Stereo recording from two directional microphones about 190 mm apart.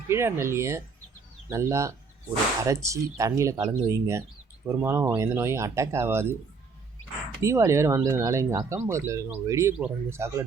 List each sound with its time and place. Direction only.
0.1 s speech: 15° right (ahead or behind)
7.4 s speech: 15° right (ahead or behind)